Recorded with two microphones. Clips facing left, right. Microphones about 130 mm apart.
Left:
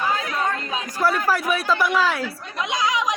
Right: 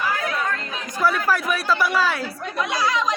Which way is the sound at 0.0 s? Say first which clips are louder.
Left 1 dB; 20° left (ahead or behind).